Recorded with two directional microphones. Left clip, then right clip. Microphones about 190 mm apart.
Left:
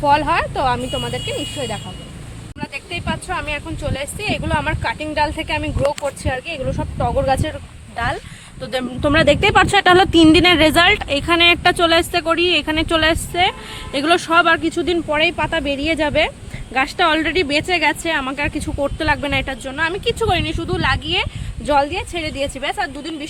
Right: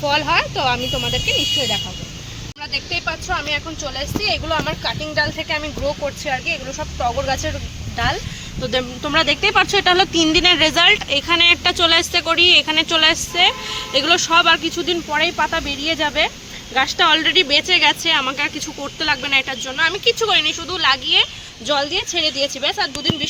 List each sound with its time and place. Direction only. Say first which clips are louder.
0.0 s speech: left 2 dB; 55° left (ahead or behind); by 1.1 s 35° left (ahead or behind)
1.1 s a woman's voice: right 6 dB; 15° left (ahead or behind)
3.2 s speech: right 3 dB; 25° left (ahead or behind)
3.9 s speech: right 3 dB; 45° left (ahead or behind)
4.8 s speech: left 1 dB; 35° left (ahead or behind); by 21.2 s 60° left (ahead or behind)
22.1 s a woman's voice: right 4 dB; 15° left (ahead or behind)